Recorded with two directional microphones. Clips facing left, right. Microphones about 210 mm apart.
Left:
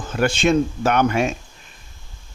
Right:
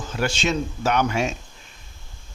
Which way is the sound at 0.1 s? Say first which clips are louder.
Left 7 dB; 55° left (ahead or behind).